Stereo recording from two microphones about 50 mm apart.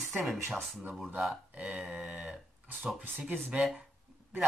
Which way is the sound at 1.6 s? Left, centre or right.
Centre.